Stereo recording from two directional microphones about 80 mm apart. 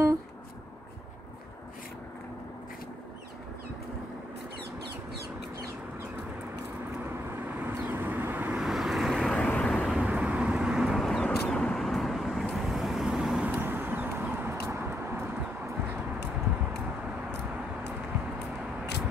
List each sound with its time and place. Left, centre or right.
7.4 s vehicle: right
8.5 s vehicle: centre
9.6 s vehicle: centre
9.8 s vehicle: centre
13.5 s vehicle: right